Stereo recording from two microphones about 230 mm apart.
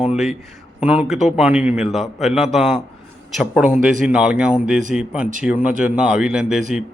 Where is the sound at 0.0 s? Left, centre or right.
Centre.